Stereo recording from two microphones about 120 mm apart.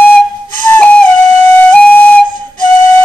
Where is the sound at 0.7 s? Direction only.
10° left (ahead or behind).